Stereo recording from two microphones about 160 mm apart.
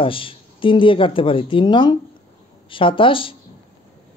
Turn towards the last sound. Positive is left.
turn(degrees=35)  # may be behind; listen again after turning